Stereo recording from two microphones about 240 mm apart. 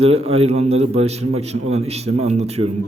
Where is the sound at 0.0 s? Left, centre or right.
Right.